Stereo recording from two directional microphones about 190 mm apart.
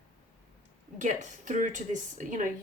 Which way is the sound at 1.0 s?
40° right (ahead or behind).